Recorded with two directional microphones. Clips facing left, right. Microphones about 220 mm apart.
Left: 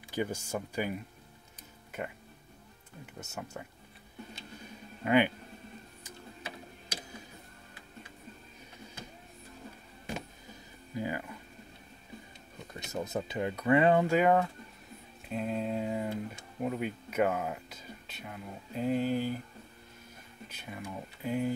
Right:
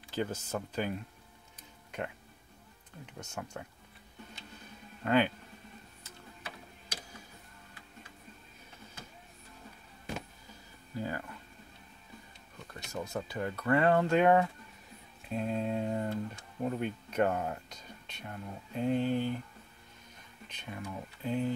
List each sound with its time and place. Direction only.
0.1 s speech: 10° left (ahead or behind)
3.2 s speech: 5° left (ahead or behind)
5.0 s speech: 15° left (ahead or behind)
6.0 s gears: 15° left (ahead or behind)
11.0 s a sound: 15° left (ahead or behind)
12.7 s speech: 20° left (ahead or behind); by 14.5 s centre (ahead or behind)
15.2 s a sound: centre (ahead or behind)
16.6 s speech: 5° left (ahead or behind)
20.4 s speech: 5° left (ahead or behind)